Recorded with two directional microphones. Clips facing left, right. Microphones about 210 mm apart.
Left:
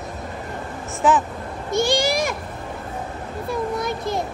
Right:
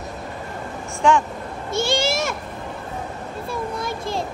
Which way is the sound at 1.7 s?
15° left (ahead or behind).